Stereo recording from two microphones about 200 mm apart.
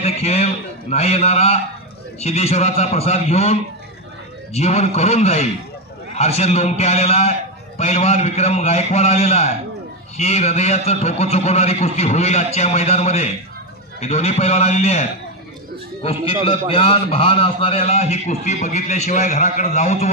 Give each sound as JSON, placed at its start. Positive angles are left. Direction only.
{"t": 0.0, "sound": "a man's voice", "side_deg": 30}
{"t": 4.6, "sound": "a man's voice", "side_deg": 35}